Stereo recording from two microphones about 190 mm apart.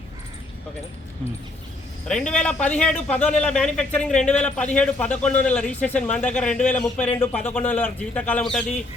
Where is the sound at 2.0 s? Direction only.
5° left (ahead or behind).